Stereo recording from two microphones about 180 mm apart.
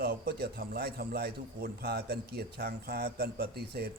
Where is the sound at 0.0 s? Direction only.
60° right (ahead or behind).